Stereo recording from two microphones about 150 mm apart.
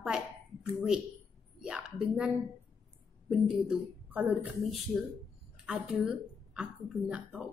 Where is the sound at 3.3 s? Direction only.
5° right (ahead or behind).